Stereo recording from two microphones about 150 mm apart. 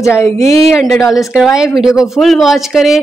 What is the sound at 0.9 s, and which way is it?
Speech, 20° left (ahead or behind).